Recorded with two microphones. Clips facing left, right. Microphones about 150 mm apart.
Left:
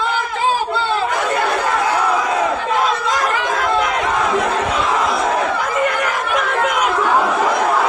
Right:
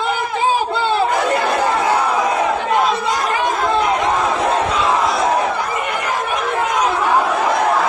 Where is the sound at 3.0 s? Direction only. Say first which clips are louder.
Right 1 dB; 90° left.